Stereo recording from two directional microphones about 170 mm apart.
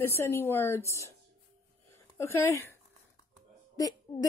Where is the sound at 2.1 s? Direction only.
15° left (ahead or behind).